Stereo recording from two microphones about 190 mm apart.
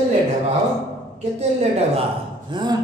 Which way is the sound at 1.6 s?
35° right (ahead or behind).